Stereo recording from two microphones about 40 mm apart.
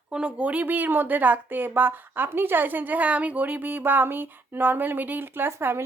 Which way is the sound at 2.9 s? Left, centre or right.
Right.